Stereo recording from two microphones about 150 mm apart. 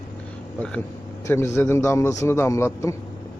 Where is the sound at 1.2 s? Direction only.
20° left (ahead or behind).